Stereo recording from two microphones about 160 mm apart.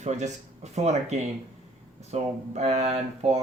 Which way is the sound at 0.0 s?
45° right (ahead or behind).